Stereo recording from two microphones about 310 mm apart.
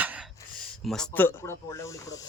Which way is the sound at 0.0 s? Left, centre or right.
Centre.